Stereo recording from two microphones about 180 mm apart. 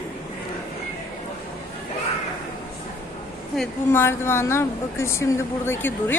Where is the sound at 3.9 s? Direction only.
15° left (ahead or behind).